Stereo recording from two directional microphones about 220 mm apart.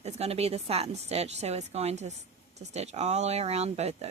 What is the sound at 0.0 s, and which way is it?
Speech, 30° right (ahead or behind).